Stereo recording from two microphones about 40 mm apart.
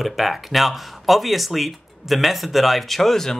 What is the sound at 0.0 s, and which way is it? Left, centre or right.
Speech, centre.